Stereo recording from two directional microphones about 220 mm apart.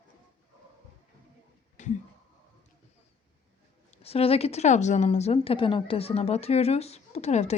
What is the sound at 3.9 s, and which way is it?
A woman's voice, 25° left (ahead or behind).